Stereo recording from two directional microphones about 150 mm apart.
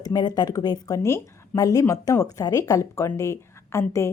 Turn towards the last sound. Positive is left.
turn(degrees=20)  # may be behind; listen again after turning